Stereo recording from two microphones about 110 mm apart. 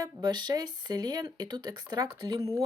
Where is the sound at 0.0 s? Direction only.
40° right (ahead or behind).